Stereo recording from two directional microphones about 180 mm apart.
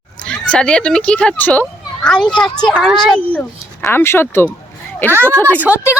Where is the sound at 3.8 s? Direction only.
15° left (ahead or behind).